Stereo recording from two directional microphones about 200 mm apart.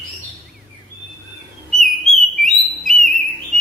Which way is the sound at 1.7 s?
Centre (ahead or behind).